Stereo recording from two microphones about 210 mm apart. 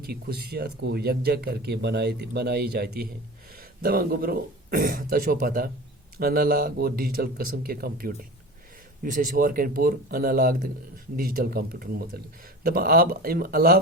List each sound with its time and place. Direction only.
0.1 s speech: 50° right (ahead or behind)